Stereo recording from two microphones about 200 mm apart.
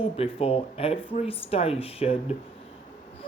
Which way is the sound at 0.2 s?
30° left (ahead or behind).